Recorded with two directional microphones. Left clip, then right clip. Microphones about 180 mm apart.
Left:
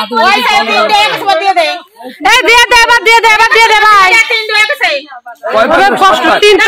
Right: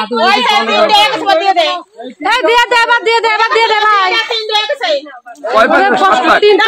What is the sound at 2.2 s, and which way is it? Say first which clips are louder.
A woman's voice: left 4 dB; 15° left (ahead or behind).